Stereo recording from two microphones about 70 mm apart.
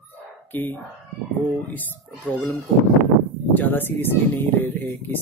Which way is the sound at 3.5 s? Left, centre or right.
Left.